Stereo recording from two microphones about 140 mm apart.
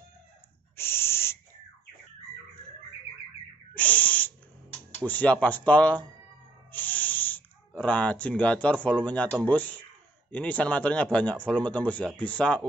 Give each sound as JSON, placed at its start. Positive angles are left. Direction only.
{"t": 0.7, "sound": "owl", "side_deg": 15}
{"t": 3.7, "sound": "owl", "side_deg": 10}
{"t": 4.7, "sound": "speech", "side_deg": 10}
{"t": 6.7, "sound": "a sound", "side_deg": 10}
{"t": 9.4, "sound": "speech", "side_deg": 10}